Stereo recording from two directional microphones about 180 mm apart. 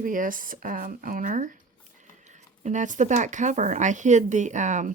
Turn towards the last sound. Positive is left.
turn(degrees=-40)  # may be behind; listen again after turning